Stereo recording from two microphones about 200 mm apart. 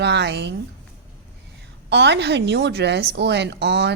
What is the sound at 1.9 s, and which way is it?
Speech, 60° right (ahead or behind).